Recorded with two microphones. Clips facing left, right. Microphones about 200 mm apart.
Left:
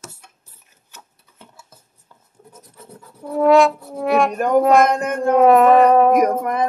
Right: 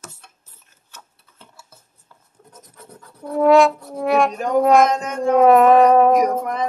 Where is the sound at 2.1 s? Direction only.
15° left (ahead or behind).